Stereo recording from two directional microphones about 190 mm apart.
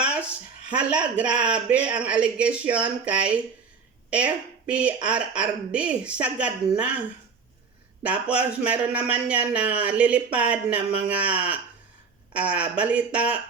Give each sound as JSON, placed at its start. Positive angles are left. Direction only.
{"t": 0.0, "sound": "a sound", "side_deg": -5}
{"t": 0.7, "sound": "a woman's voice", "side_deg": -5}
{"t": 8.0, "sound": "a man's voice", "side_deg": -5}